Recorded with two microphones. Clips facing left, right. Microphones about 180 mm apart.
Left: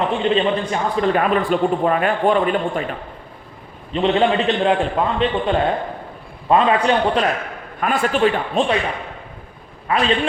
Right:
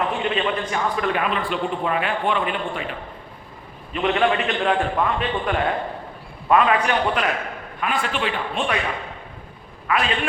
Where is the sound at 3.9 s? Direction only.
30° left (ahead or behind).